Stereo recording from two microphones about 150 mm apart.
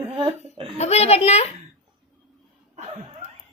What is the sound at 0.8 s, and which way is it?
Speech, 45° left (ahead or behind).